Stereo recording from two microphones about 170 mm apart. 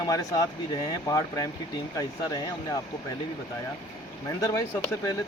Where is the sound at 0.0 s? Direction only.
20° left (ahead or behind).